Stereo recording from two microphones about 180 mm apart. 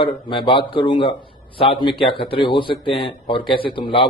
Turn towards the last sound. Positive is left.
turn(degrees=25)  # may be behind; listen again after turning